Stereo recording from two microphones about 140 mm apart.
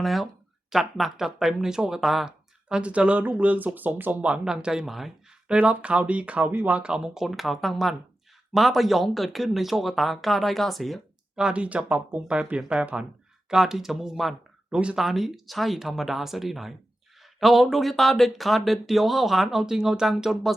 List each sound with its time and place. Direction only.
0.0 s speech: centre (ahead or behind)